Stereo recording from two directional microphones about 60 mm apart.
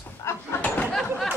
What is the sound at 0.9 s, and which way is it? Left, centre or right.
Speech, centre.